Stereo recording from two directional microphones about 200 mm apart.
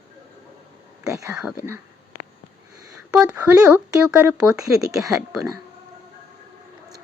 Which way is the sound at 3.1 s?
5° right (ahead or behind).